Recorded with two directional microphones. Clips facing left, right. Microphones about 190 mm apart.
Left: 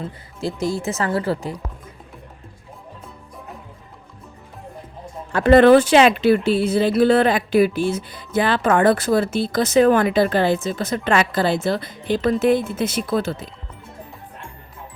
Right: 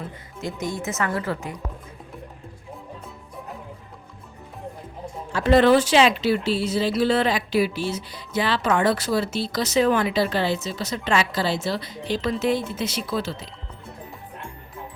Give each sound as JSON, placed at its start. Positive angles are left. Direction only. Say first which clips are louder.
{"t": 0.0, "sound": "a woman's voice", "louder": "left 5 dB", "side_deg": 30}
{"t": 5.3, "sound": "speech", "louder": "left 5 dB", "side_deg": 55}